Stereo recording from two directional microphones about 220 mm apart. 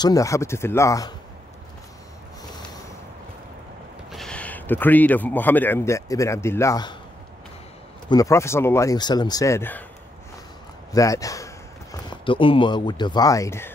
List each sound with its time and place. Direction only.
0.0 s speech: 15° left (ahead or behind)
4.1 s speech: 5° left (ahead or behind)
8.1 s speech: 15° left (ahead or behind)
10.9 s speech: 15° left (ahead or behind)